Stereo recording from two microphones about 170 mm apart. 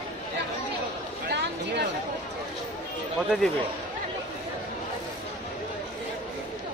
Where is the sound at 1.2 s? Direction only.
75° right (ahead or behind).